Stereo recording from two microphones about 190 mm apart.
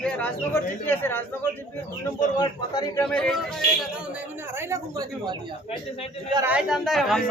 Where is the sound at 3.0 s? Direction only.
5° left (ahead or behind).